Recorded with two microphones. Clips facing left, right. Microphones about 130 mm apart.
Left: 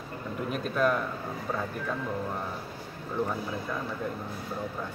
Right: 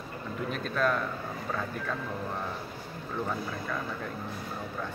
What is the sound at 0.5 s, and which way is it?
Speech, 10° left (ahead or behind).